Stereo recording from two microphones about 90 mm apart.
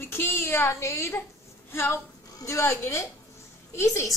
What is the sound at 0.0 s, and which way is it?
A woman's voice, 25° left (ahead or behind).